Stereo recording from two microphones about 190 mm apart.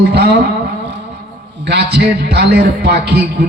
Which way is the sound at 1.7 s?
60° right (ahead or behind).